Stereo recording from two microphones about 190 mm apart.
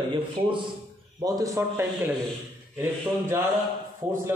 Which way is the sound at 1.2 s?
20° right (ahead or behind).